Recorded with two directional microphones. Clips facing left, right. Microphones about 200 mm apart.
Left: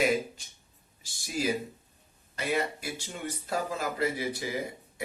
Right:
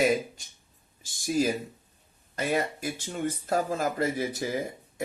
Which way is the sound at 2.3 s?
45° right (ahead or behind).